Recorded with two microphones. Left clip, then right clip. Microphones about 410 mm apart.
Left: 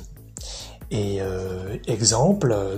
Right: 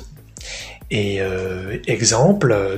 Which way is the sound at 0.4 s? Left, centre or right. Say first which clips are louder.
Right 6 dB; right.